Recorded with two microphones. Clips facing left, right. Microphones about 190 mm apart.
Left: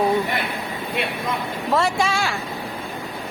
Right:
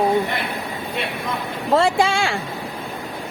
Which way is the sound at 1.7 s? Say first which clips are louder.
Right 4 dB; 30° right (ahead or behind).